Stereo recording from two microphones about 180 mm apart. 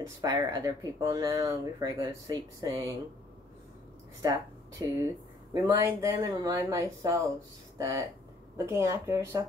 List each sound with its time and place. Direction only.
0.0 s speech: 20° right (ahead or behind)
4.2 s speech: 20° right (ahead or behind)